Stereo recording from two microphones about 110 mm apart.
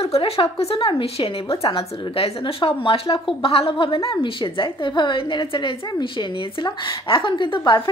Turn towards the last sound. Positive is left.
turn(degrees=50)  # may be behind; listen again after turning